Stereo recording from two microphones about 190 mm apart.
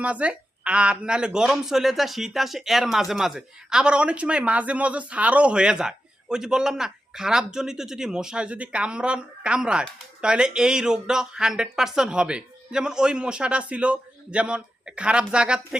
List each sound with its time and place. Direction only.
0.0 s speech: 5° right (ahead or behind)